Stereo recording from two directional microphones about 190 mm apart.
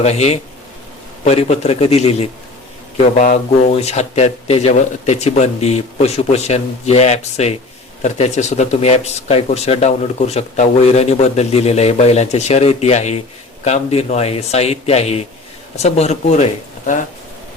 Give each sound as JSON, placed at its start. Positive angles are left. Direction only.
{"t": 0.0, "sound": "a man's voice", "side_deg": 35}